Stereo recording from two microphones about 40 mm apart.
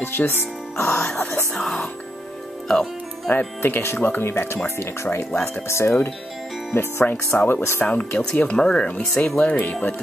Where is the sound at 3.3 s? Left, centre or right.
Left.